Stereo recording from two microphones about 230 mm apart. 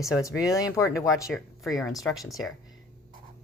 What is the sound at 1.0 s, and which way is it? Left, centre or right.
Speech, centre.